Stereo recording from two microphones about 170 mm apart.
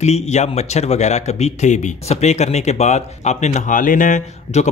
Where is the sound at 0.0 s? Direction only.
40° left (ahead or behind).